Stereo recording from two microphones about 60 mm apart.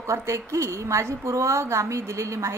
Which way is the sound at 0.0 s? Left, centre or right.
Right.